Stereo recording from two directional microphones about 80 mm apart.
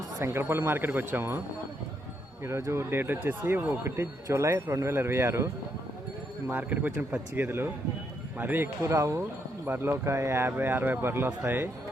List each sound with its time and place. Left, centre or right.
0.2 s speech: right
2.4 s speech: right
6.5 s speech: right
9.6 s speech: right
9.9 s speech: right